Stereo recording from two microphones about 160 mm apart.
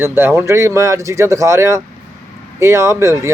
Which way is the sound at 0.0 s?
15° right (ahead or behind).